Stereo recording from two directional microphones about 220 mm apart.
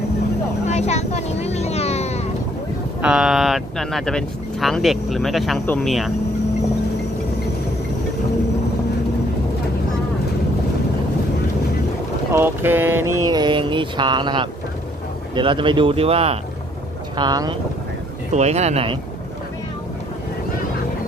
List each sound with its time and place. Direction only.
0.7 s vehicle: 30° left (ahead or behind)
3.0 s speech: 5° right (ahead or behind)
12.3 s mantra: 10° right (ahead or behind); by 16.4 s 25° right (ahead or behind)
17.2 s speech: 20° right (ahead or behind)
18.3 s mantra: 30° right (ahead or behind)